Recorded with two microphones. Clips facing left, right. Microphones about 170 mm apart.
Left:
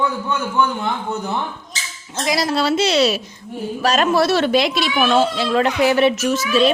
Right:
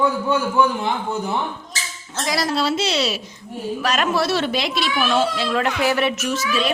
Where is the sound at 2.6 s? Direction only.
60° left (ahead or behind).